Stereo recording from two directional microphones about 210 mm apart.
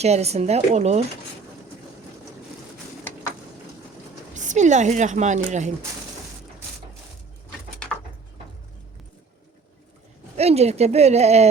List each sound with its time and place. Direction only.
0.0 s a woman's voice: 30° right (ahead or behind)
4.4 s a woman's voice: 35° right (ahead or behind)
10.3 s a woman's voice: 30° right (ahead or behind)